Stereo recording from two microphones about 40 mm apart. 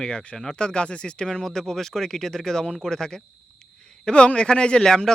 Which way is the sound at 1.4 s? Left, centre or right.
Centre.